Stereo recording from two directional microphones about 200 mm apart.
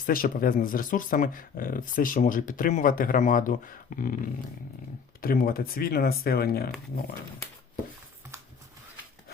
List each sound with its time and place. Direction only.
0.0 s speech: 45° left (ahead or behind)
5.2 s speech: 45° left (ahead or behind)